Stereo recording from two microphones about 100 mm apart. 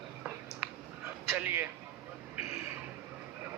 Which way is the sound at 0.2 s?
15° right (ahead or behind).